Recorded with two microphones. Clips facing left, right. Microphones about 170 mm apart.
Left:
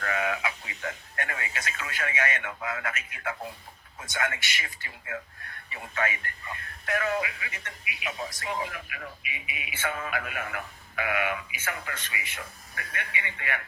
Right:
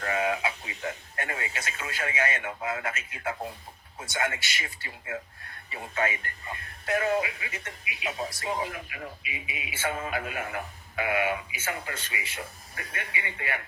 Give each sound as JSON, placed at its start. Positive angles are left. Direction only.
{"t": 0.0, "sound": "speech", "side_deg": -25}